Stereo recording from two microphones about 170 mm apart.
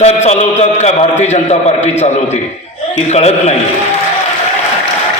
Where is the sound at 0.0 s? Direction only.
40° left (ahead or behind).